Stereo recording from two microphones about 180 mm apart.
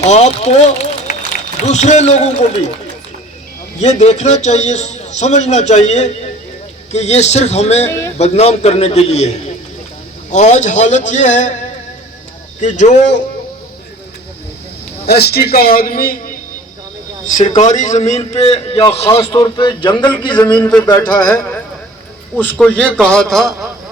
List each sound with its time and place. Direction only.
0.0 s a man's voice: 40° left (ahead or behind)
3.8 s a man's voice: 40° left (ahead or behind)
10.3 s a man's voice: 40° left (ahead or behind)
15.0 s a man's voice: 65° left (ahead or behind)
17.5 s a man's voice: 40° left (ahead or behind); by 20.6 s 25° left (ahead or behind)
20.6 s speech: 5° left (ahead or behind)
20.8 s speech: 20° left (ahead or behind)
22.4 s a man's voice: 10° left (ahead or behind)